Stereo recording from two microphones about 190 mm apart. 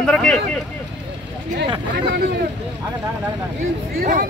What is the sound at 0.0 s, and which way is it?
Speech, 5° left (ahead or behind).